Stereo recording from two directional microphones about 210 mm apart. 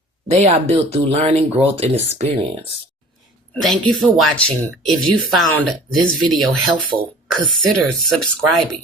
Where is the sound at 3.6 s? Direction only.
Centre (ahead or behind).